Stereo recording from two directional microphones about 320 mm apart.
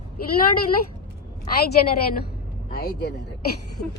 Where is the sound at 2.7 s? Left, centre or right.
Left.